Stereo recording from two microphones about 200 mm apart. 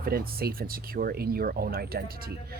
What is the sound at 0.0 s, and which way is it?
Speech, 50° right (ahead or behind).